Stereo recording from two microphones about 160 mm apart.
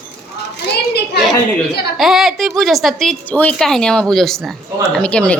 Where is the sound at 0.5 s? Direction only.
90° left.